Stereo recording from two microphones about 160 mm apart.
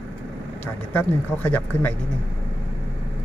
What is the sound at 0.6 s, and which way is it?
A man's voice, 10° left (ahead or behind).